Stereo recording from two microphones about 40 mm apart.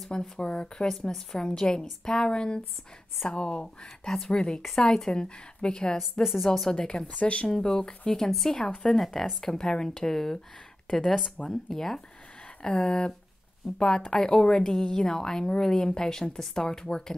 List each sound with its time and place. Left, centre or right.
0.4 s a woman's voice: left
4.0 s a woman's voice: centre
5.1 s a woman's voice: left
6.2 s speech: centre
6.7 s a woman's voice: left
7.5 s a woman's voice: centre
12.6 s a woman's voice: centre